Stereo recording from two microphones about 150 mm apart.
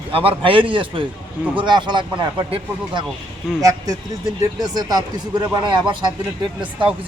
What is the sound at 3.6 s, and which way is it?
Speech, 20° right (ahead or behind).